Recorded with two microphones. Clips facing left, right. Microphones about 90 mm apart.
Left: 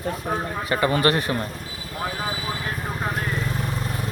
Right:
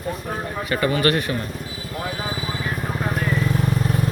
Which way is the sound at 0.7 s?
25° left (ahead or behind).